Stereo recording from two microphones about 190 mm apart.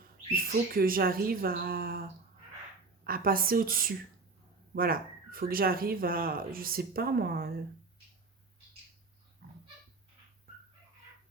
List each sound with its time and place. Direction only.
0.3 s speech: 50° right (ahead or behind)
9.4 s pig: 60° right (ahead or behind)